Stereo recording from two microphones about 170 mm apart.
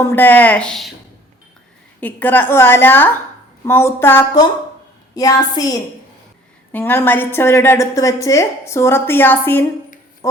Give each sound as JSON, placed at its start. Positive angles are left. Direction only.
{"t": 0.0, "sound": "a woman's voice", "side_deg": 15}
{"t": 2.0, "sound": "a woman's voice", "side_deg": 10}
{"t": 6.7, "sound": "a woman's voice", "side_deg": 10}